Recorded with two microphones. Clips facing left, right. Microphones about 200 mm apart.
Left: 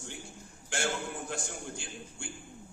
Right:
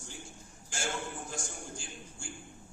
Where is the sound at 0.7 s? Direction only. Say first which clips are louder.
Left 3 dB; 65° left (ahead or behind).